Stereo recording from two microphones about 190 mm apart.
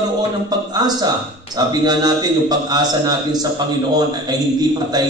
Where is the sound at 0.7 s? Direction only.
20° right (ahead or behind).